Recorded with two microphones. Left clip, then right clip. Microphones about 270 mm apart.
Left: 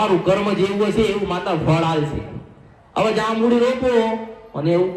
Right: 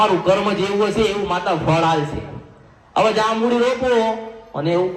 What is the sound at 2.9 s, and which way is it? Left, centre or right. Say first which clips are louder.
A man's voice: right 3 dB; right.